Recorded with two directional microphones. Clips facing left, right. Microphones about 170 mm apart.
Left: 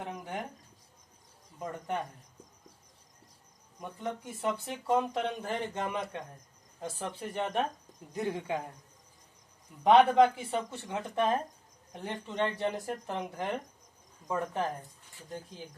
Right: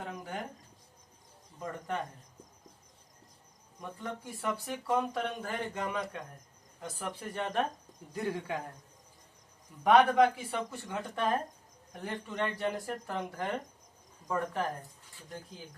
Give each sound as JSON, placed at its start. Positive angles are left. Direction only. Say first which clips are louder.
{"t": 0.0, "sound": "a sound", "louder": "left 1 dB", "side_deg": 20}
{"t": 3.8, "sound": "speech", "louder": "left 3 dB", "side_deg": 20}
{"t": 9.8, "sound": "speech", "louder": "left 2 dB", "side_deg": 25}